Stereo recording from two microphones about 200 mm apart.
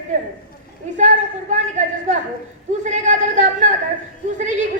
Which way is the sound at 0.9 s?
40° right (ahead or behind).